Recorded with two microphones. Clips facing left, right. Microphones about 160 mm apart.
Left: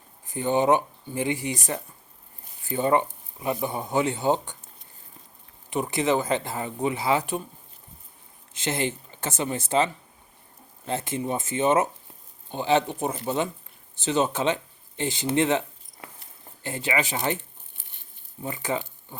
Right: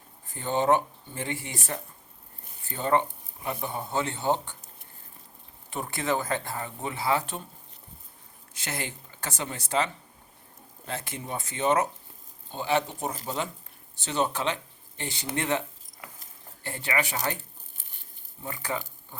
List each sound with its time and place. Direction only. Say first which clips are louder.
0.3 s speech: left 3 dB; 15° left (ahead or behind)
2.6 s speech: left 3 dB; 15° left (ahead or behind)
5.7 s speech: left 5 dB; 20° left (ahead or behind)
8.5 s speech: left 8 dB; 25° left (ahead or behind)
18.4 s speech: left 4 dB; 20° left (ahead or behind)